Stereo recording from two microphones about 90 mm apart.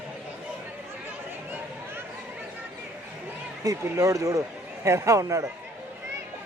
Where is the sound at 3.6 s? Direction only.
40° right (ahead or behind).